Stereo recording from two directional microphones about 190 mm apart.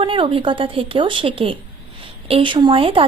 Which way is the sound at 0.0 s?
30° right (ahead or behind).